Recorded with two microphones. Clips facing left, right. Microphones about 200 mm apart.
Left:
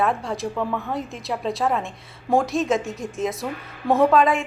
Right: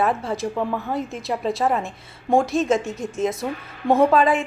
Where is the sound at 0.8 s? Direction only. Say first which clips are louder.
Right 2 dB; centre (ahead or behind).